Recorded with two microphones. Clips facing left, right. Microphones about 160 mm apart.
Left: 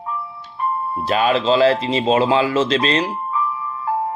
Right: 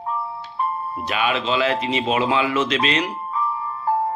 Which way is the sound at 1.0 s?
35° left (ahead or behind).